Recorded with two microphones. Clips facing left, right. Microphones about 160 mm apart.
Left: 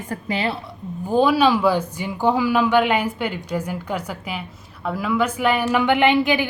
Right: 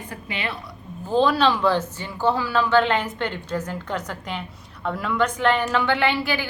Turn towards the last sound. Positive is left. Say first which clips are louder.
# left 6 dB
turn(degrees=20)  # may be behind; listen again after turning